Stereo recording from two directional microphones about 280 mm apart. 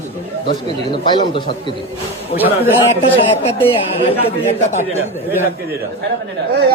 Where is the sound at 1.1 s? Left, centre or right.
Centre.